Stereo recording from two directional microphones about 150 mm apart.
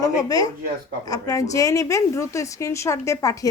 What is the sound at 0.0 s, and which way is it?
A woman's voice, 25° left (ahead or behind).